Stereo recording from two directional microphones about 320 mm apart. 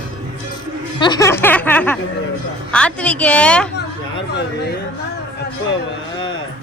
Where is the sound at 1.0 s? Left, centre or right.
Centre.